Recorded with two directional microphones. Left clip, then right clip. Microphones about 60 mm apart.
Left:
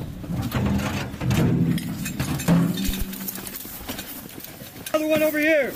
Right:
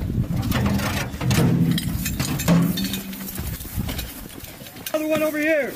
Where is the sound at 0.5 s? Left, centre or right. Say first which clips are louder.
Right 2 dB; right.